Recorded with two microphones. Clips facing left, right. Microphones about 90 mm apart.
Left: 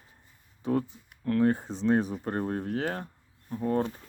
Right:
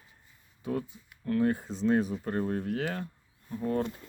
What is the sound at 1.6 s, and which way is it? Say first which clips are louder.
Speech: even; 60° left (ahead or behind).